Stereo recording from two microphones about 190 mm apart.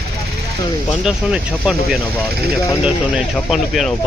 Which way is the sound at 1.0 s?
5° right (ahead or behind).